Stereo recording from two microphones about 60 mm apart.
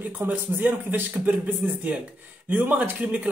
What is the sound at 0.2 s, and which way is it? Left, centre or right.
Speech, right.